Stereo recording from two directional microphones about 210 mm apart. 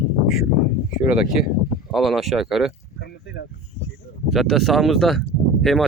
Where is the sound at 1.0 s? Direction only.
5° right (ahead or behind).